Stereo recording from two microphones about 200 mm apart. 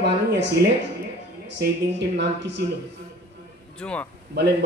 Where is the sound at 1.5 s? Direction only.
60° right (ahead or behind).